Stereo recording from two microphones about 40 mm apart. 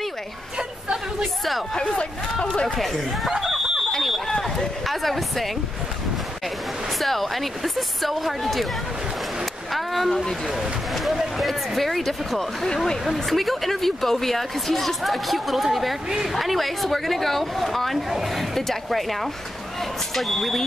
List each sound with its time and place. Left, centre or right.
1.2 s a sound: centre
1.7 s speech: centre
2.7 s speech: centre
4.4 s speech: centre
7.0 s speech: centre
9.4 s a sound: centre
10.4 s speech: centre
13.0 s speech: centre